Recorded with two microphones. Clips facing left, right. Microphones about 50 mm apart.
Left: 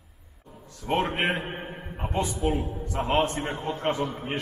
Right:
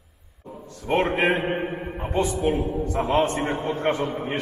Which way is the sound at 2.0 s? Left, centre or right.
Right.